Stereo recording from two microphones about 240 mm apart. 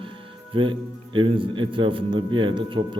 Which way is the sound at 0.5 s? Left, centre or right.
Right.